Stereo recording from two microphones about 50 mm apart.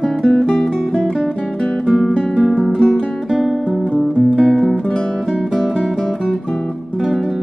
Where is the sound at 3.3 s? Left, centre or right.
Centre.